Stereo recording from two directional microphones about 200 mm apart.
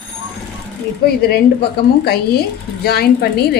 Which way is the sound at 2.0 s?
50° left (ahead or behind).